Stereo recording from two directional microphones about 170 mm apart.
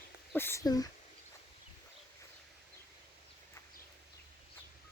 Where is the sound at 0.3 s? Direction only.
15° left (ahead or behind).